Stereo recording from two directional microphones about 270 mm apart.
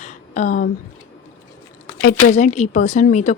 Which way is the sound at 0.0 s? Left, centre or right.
Left.